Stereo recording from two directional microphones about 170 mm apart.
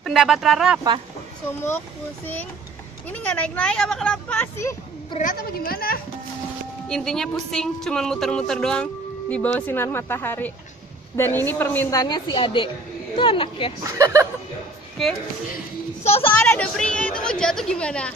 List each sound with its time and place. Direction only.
0.0 s speech: centre (ahead or behind)
3.1 s speech: 10° left (ahead or behind)
5.2 s a woman's voice: 55° left (ahead or behind)
6.9 s a woman's voice: 5° left (ahead or behind)
12.0 s a woman's voice: 25° left (ahead or behind)
13.8 s speech: 20° right (ahead or behind)
15.0 s a woman's voice: centre (ahead or behind)
16.0 s a woman's voice: 35° left (ahead or behind)
16.3 s a woman's voice: 10° left (ahead or behind)